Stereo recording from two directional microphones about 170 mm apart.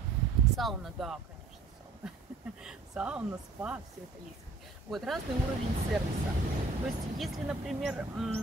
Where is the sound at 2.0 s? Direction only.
5° right (ahead or behind).